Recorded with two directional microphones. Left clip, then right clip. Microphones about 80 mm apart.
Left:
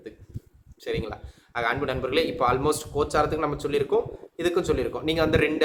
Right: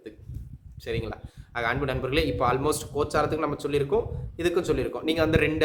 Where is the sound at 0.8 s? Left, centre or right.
Right.